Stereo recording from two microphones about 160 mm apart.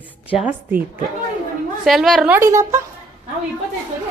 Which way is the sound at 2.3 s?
20° right (ahead or behind).